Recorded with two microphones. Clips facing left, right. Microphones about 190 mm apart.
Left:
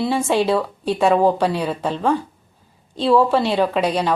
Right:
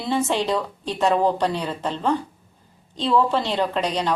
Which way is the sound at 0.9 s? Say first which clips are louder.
Left 3 dB; 55° left (ahead or behind).